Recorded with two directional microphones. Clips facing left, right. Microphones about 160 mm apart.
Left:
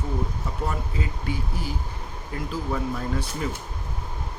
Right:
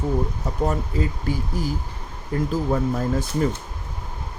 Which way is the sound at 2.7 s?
40° right (ahead or behind).